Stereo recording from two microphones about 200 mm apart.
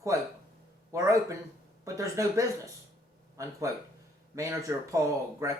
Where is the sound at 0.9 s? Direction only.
15° right (ahead or behind).